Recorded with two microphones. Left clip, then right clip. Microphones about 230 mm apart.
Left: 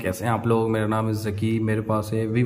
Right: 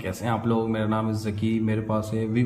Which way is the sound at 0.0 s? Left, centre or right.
Centre.